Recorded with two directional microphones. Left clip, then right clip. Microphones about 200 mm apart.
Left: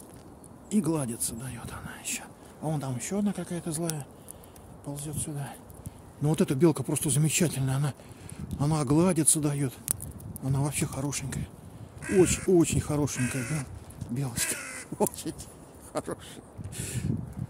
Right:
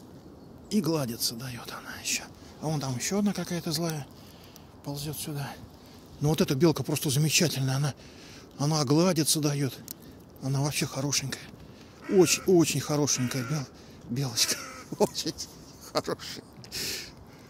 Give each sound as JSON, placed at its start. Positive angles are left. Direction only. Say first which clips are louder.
{"t": 0.7, "sound": "speech", "louder": "right 1 dB", "side_deg": 25}
{"t": 6.2, "sound": "speech", "louder": "even", "side_deg": 25}
{"t": 15.9, "sound": "speech", "louder": "right 4 dB", "side_deg": 5}